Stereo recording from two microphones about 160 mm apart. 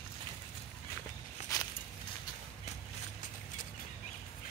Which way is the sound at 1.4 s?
50° left (ahead or behind).